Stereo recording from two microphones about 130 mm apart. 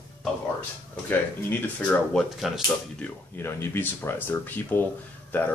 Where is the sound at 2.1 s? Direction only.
Centre (ahead or behind).